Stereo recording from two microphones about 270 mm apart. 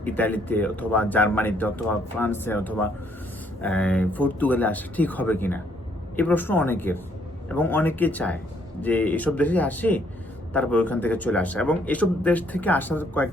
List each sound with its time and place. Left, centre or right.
0.0 s a man's voice: centre